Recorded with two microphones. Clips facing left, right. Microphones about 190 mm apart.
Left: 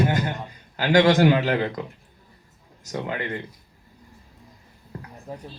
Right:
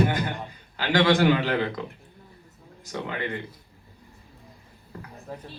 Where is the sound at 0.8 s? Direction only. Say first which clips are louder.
Left 4 dB; 45° left (ahead or behind).